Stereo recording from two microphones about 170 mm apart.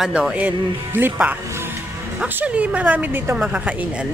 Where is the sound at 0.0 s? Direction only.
5° right (ahead or behind).